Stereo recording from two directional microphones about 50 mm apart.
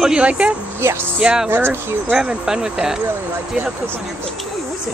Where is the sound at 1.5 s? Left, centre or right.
Right.